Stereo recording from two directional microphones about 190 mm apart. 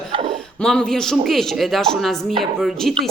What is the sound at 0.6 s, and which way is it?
Speech, 5° left (ahead or behind).